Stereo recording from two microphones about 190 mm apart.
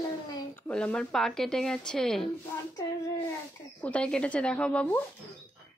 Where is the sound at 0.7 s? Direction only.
5° left (ahead or behind).